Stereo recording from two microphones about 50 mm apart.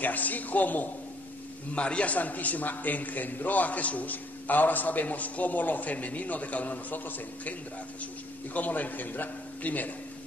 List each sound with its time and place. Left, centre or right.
0.0 s a man's voice: left
1.8 s a man's voice: left
8.5 s a man's voice: left